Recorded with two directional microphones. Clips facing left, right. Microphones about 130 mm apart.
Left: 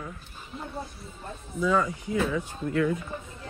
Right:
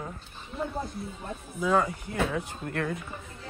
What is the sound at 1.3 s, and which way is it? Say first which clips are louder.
Speech: even; 55° right (ahead or behind).